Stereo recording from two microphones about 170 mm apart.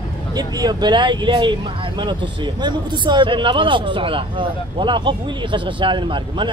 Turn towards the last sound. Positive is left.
turn(degrees=-30)  # may be behind; listen again after turning